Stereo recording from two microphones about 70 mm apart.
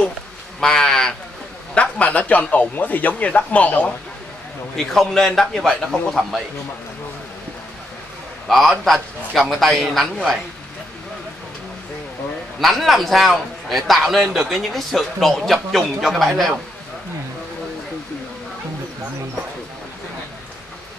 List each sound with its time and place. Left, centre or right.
0.6 s a man's voice: centre
1.8 s a man's voice: centre
4.7 s a man's voice: centre
8.5 s a man's voice: centre
12.5 s a man's voice: centre